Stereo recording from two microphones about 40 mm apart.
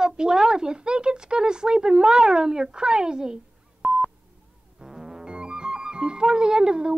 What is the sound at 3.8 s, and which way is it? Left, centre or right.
Telephone dialing, centre.